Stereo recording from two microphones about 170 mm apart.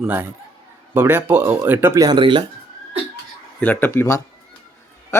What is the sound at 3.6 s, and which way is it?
Speech, 10° left (ahead or behind).